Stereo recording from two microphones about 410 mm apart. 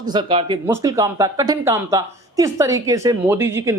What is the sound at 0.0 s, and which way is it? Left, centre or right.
Speech, centre.